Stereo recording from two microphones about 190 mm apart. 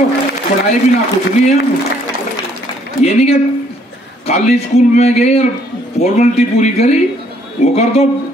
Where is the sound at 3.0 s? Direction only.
35° left (ahead or behind).